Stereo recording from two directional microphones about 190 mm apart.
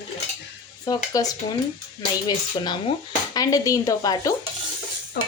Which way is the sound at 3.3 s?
20° left (ahead or behind).